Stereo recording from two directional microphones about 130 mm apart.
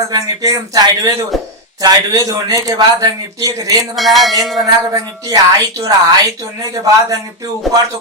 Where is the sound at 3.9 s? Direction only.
Centre (ahead or behind).